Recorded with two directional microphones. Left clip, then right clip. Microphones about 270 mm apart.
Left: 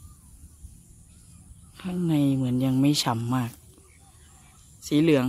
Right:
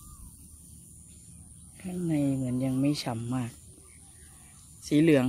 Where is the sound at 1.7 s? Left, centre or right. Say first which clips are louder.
Left 4 dB; centre.